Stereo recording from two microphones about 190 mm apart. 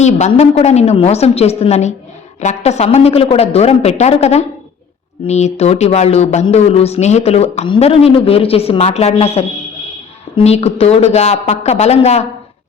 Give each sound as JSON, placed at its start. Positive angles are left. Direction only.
{"t": 0.0, "sound": "speech", "side_deg": 35}